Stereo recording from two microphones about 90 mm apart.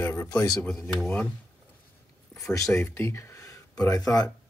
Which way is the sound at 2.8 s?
25° left (ahead or behind).